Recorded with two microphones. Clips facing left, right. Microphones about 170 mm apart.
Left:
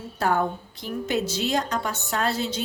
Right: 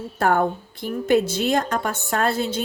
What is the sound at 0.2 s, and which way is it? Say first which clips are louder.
A woman's voice: right 4 dB; 55° right (ahead or behind).